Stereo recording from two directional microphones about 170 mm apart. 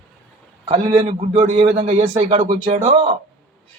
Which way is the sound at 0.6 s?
30° right (ahead or behind).